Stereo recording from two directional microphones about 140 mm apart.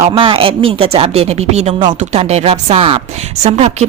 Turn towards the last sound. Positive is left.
turn(degrees=-50)  # may be behind; listen again after turning